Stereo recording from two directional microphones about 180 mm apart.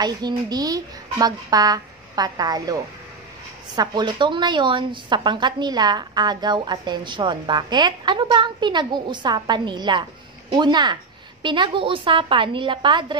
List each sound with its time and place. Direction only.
0.0 s a woman's voice: 20° right (ahead or behind)